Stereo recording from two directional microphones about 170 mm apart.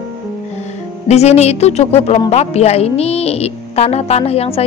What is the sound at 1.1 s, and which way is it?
A woman's voice, 40° left (ahead or behind).